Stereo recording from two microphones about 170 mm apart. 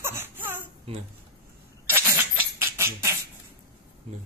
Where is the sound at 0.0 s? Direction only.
15° right (ahead or behind).